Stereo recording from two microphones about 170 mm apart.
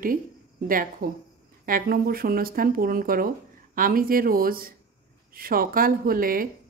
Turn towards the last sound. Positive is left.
turn(degrees=-55)  # may be behind; listen again after turning